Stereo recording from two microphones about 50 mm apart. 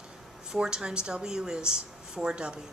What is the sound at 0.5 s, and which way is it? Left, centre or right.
Speech, centre.